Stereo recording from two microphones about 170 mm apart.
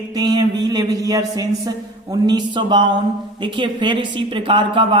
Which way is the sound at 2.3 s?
25° right (ahead or behind).